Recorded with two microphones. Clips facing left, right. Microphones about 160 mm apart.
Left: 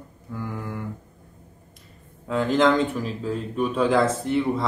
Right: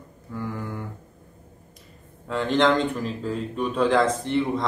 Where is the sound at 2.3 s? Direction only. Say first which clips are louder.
Left 1 dB; centre (ahead or behind).